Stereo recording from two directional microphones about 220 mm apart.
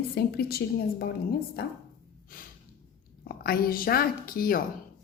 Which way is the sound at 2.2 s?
40° left (ahead or behind).